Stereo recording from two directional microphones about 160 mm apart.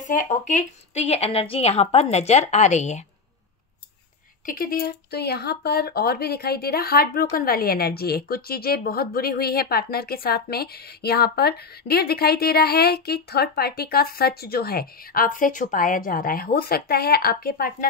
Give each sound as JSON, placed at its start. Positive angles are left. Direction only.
{"t": 0.0, "sound": "a woman's voice", "side_deg": 55}
{"t": 4.5, "sound": "speech", "side_deg": 65}